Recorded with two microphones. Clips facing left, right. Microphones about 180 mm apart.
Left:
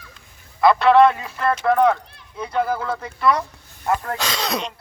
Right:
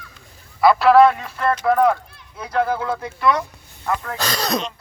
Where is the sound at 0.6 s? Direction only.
5° right (ahead or behind).